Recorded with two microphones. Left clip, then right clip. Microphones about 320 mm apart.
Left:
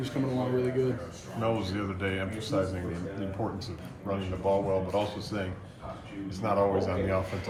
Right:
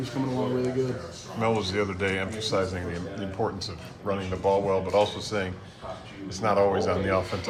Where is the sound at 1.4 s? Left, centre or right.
Centre.